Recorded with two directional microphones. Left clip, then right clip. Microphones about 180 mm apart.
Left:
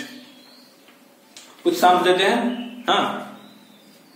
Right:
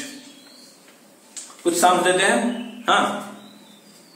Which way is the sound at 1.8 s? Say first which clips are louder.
Left 1 dB; 20° left (ahead or behind).